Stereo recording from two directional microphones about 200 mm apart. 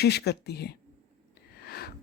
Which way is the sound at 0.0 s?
55° left (ahead or behind).